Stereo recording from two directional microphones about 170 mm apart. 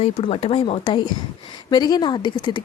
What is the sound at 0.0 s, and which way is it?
Speech, 35° left (ahead or behind).